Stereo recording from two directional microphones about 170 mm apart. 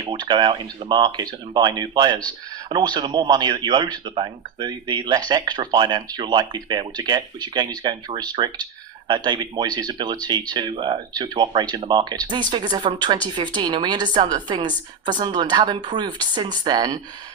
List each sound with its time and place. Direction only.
0.1 s speech: 25° right (ahead or behind)